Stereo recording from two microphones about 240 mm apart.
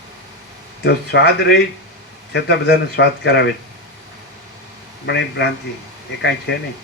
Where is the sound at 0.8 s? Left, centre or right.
Left.